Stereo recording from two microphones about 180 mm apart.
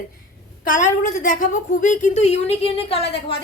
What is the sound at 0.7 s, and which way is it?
A woman's voice, 50° left (ahead or behind).